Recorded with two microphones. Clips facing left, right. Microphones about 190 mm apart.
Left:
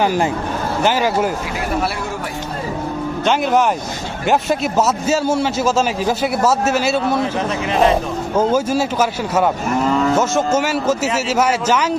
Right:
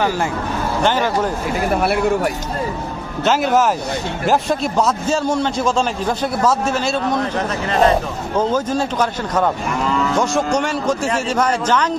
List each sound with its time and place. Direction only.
0.0 s a man's voice: 15° left (ahead or behind)
3.3 s a man's voice: centre (ahead or behind)